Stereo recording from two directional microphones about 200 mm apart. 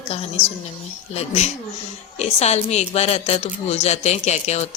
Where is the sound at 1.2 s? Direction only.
35° left (ahead or behind).